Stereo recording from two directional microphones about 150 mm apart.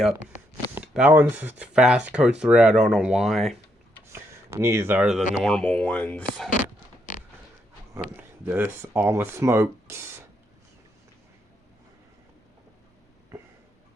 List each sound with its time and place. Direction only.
0.8 s speech: 10° right (ahead or behind)
4.0 s a sound: 15° right (ahead or behind)
5.0 s speech: 5° right (ahead or behind)
7.9 s speech: 15° right (ahead or behind)